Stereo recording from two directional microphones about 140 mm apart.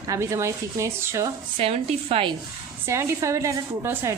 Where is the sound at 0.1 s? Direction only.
20° right (ahead or behind).